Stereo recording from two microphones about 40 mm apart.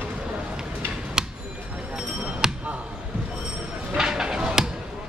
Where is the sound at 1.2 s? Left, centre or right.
Centre.